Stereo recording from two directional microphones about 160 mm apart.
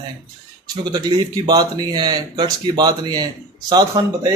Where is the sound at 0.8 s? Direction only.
25° right (ahead or behind).